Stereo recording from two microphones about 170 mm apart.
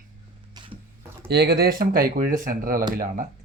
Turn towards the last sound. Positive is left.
turn(degrees=-50)  # may be behind; listen again after turning